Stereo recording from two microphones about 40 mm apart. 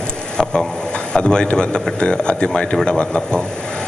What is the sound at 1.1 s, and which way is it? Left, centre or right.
A man's voice, left.